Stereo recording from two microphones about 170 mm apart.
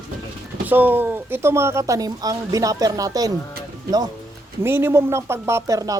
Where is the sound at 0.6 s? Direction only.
10° right (ahead or behind).